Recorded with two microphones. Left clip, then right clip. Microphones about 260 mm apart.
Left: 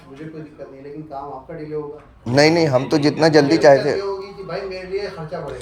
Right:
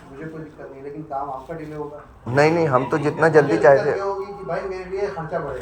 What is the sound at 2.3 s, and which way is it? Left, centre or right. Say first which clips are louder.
Speech: left 2 dB; left.